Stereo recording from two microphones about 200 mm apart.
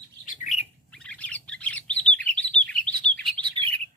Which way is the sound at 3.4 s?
25° right (ahead or behind).